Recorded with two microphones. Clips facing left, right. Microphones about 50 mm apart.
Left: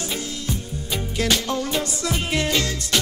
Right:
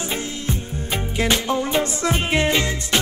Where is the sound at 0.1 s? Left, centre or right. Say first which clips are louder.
Right 2 dB; right.